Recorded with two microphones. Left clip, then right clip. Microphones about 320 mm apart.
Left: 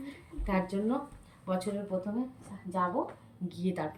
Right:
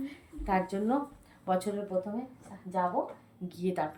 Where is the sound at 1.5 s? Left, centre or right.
Centre.